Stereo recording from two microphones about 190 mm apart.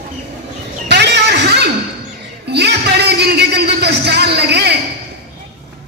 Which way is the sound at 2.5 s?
60° right (ahead or behind).